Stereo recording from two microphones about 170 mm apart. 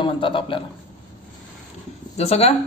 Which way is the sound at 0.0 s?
30° left (ahead or behind).